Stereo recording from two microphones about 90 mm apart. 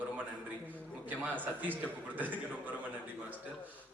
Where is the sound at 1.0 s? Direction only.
20° right (ahead or behind).